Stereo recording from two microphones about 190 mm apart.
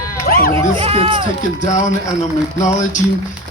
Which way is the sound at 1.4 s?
40° left (ahead or behind).